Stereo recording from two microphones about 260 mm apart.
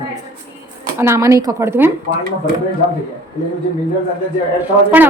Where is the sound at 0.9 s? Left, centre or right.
Centre.